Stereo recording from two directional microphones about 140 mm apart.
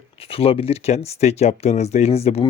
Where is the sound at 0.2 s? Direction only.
45° left (ahead or behind).